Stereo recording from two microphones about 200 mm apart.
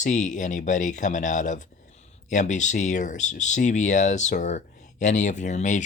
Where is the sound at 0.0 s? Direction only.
40° left (ahead or behind).